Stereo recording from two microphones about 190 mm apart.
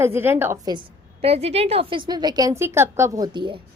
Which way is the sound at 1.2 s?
30° right (ahead or behind).